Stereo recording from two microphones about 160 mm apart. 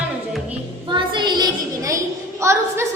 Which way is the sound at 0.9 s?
30° right (ahead or behind).